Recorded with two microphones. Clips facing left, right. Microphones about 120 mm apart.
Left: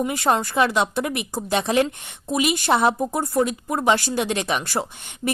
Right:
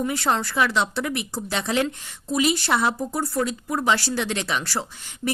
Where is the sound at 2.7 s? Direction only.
25° left (ahead or behind).